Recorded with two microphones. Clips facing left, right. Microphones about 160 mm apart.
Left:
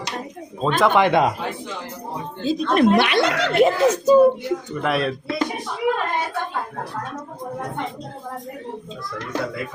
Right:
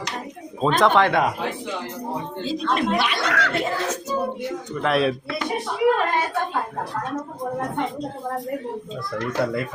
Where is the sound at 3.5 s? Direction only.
80° left.